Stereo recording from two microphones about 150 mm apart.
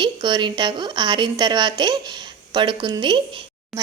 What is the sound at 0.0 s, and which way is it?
A woman's voice, 30° right (ahead or behind).